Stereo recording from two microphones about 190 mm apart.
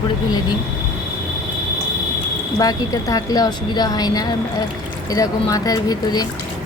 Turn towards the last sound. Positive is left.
turn(degrees=20)  # may be behind; listen again after turning